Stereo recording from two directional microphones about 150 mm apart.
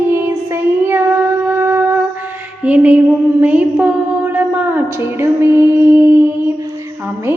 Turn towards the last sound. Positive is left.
turn(degrees=-15)  # may be behind; listen again after turning